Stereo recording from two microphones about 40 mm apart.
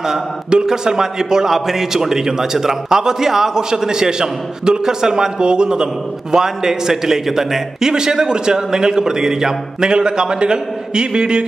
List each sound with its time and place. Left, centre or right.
0.0 s a man's voice: centre